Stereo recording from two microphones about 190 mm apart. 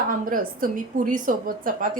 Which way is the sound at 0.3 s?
45° right (ahead or behind).